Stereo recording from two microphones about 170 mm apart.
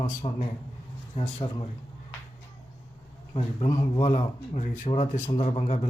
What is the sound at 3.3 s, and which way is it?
A man's voice, 35° left (ahead or behind).